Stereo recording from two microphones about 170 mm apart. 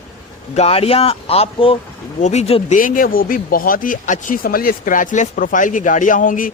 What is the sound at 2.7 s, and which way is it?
Speech, 55° left (ahead or behind).